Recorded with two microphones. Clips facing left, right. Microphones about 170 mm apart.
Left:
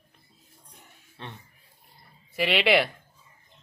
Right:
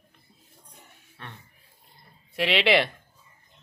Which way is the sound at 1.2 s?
20° left (ahead or behind).